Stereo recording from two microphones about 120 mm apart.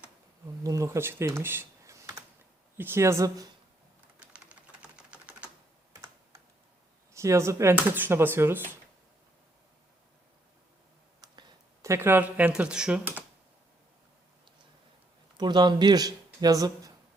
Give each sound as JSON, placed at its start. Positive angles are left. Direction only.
{"t": 0.6, "sound": "speech", "side_deg": -25}
{"t": 4.2, "sound": "typing", "side_deg": -10}
{"t": 5.9, "sound": "computer keyboard", "side_deg": -30}
{"t": 7.1, "sound": "speech", "side_deg": -25}
{"t": 11.2, "sound": "speech", "side_deg": -30}
{"t": 15.4, "sound": "speech", "side_deg": -35}